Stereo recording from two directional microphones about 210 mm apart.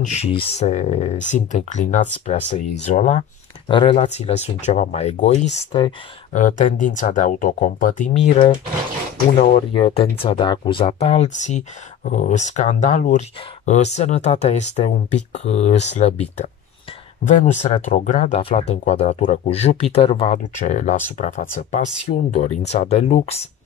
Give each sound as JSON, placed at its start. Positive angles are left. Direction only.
{"t": 0.1, "sound": "speech", "side_deg": 30}
{"t": 6.3, "sound": "speech", "side_deg": 35}